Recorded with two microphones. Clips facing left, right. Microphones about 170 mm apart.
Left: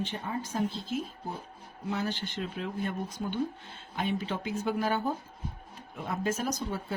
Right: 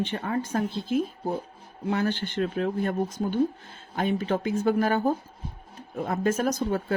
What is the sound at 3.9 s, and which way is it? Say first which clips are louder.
Speech: right 6 dB; 50° right (ahead or behind).